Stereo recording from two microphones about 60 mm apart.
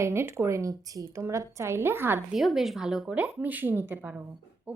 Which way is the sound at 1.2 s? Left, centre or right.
Right.